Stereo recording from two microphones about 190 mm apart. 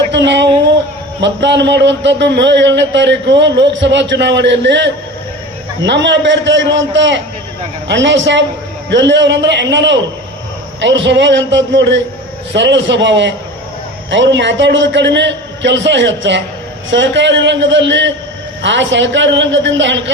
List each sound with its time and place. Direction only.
0.1 s a man's voice: 70° right (ahead or behind)